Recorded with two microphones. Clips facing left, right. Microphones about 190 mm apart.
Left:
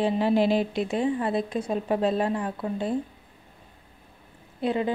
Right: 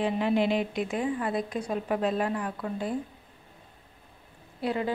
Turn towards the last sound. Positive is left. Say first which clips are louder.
# left 3 dB
turn(degrees=20)  # may be behind; listen again after turning